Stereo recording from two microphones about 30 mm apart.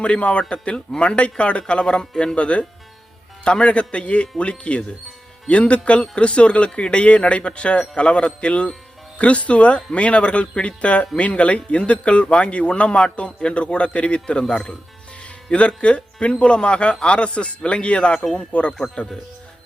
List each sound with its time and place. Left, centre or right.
0.0 s a man's voice: left
15.5 s a man's voice: left
18.5 s speech: left